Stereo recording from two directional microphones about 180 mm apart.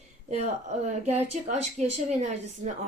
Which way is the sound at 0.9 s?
40° right (ahead or behind).